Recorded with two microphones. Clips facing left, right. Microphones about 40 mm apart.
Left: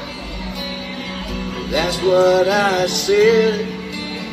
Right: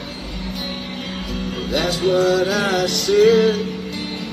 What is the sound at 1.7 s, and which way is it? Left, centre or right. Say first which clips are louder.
Music: left 2 dB; left.